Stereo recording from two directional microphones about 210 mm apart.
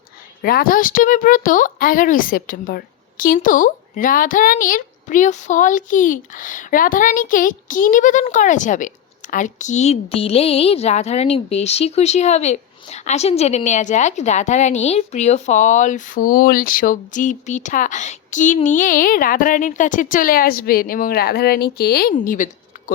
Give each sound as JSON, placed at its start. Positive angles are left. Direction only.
{"t": 0.4, "sound": "speech", "side_deg": 45}